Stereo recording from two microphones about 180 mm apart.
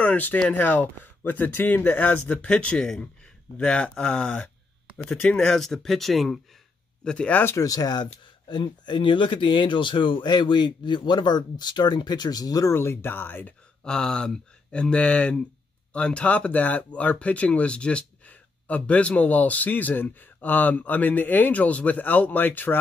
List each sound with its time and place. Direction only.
0.0 s speech: 10° left (ahead or behind)